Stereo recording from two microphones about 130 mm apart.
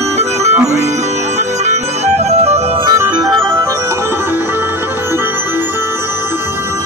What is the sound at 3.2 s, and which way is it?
Music, 25° right (ahead or behind).